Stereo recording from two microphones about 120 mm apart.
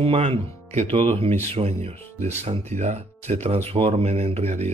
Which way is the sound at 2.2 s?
70° right (ahead or behind).